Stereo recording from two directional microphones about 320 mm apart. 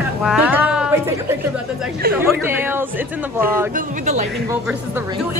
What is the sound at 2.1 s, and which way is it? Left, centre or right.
Speech, centre.